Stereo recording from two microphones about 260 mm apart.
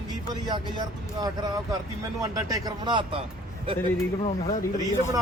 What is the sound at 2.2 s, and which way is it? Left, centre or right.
Speech, centre.